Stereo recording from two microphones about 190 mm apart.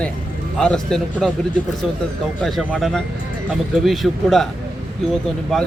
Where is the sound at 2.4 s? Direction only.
Centre (ahead or behind).